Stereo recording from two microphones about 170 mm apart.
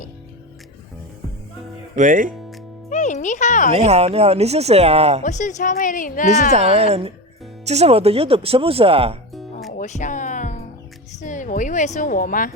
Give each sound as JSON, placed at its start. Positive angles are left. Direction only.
{"t": 2.0, "sound": "speech", "side_deg": -50}
{"t": 2.9, "sound": "music", "side_deg": 45}
{"t": 3.7, "sound": "speech", "side_deg": -35}
{"t": 5.2, "sound": "a woman's voice", "side_deg": 45}
{"t": 6.5, "sound": "speech", "side_deg": -40}
{"t": 9.3, "sound": "music", "side_deg": 0}
{"t": 9.7, "sound": "music", "side_deg": 45}
{"t": 11.2, "sound": "speech", "side_deg": 50}